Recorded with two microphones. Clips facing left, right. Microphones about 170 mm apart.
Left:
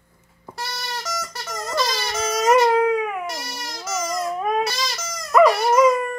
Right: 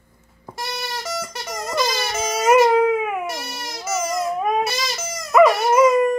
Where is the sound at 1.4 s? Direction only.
10° right (ahead or behind).